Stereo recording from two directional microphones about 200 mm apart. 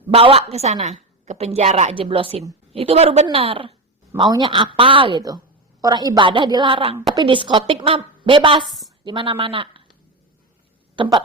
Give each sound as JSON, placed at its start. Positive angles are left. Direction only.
{"t": 0.1, "sound": "a woman's voice", "side_deg": -30}
{"t": 10.9, "sound": "speech", "side_deg": -25}